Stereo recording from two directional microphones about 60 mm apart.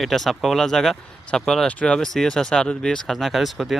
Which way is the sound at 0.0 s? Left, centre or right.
Centre.